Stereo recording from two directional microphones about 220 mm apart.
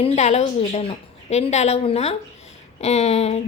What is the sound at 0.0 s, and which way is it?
A woman's voice, 30° left (ahead or behind).